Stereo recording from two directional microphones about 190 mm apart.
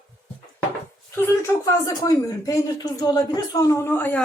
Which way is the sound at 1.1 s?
15° left (ahead or behind).